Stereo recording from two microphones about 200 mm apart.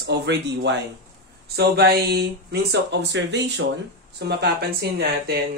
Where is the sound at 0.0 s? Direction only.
55° right (ahead or behind).